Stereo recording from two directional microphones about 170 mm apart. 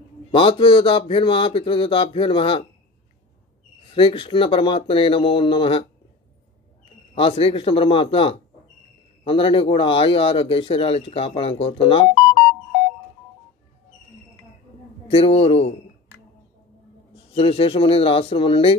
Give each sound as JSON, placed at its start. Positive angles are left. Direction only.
{"t": 0.3, "sound": "a man's voice", "side_deg": 30}
{"t": 3.9, "sound": "a man's voice", "side_deg": 30}
{"t": 7.2, "sound": "a man's voice", "side_deg": 35}
{"t": 15.0, "sound": "a man's voice", "side_deg": 35}
{"t": 17.1, "sound": "a man's voice", "side_deg": 35}